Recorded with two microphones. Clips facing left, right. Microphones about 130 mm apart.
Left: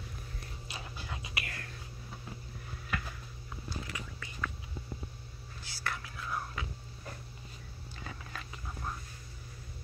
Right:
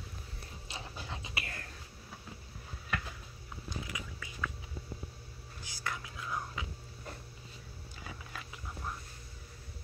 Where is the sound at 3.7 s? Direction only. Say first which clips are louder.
Even; 15° right (ahead or behind).